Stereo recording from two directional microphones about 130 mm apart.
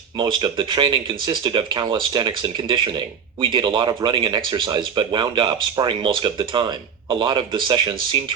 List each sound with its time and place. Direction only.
0.2 s speech: 35° right (ahead or behind)